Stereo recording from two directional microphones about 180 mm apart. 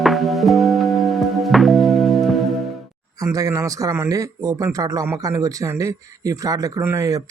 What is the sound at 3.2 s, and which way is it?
Speech, 20° right (ahead or behind).